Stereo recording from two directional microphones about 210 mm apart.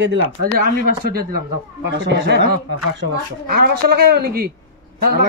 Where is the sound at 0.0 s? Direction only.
55° right (ahead or behind).